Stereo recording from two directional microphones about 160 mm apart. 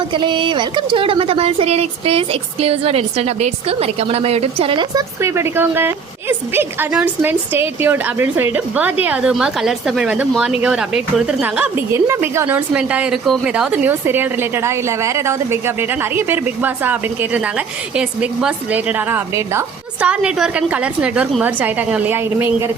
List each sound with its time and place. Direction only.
0.1 s speech: 30° right (ahead or behind)
5.2 s a woman's voice: 15° right (ahead or behind)